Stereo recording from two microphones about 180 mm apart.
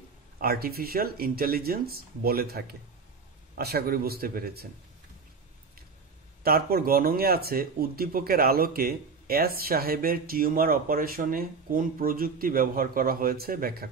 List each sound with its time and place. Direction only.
0.4 s speech: 55° right (ahead or behind)
6.4 s speech: 55° right (ahead or behind)